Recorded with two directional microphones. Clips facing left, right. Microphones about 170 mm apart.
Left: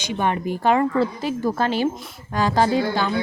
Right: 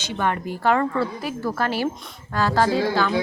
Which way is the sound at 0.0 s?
15° left (ahead or behind).